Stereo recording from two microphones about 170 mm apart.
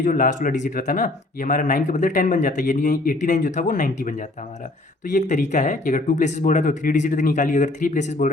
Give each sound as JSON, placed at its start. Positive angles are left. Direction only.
{"t": 0.0, "sound": "speech", "side_deg": 50}
{"t": 5.1, "sound": "speech", "side_deg": 50}